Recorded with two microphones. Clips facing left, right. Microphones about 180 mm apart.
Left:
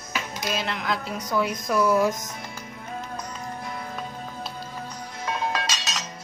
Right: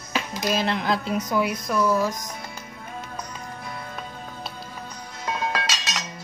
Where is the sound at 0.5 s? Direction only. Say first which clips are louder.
Right 4 dB; 30° right (ahead or behind).